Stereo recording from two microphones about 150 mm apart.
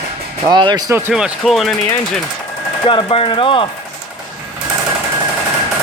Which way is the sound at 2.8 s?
35° left (ahead or behind).